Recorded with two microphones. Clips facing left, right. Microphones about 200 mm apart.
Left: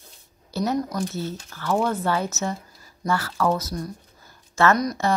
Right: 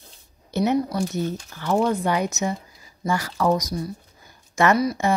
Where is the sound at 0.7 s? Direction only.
10° right (ahead or behind).